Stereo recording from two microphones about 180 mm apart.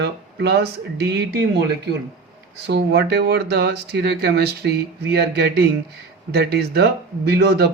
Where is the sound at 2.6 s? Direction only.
65° right (ahead or behind).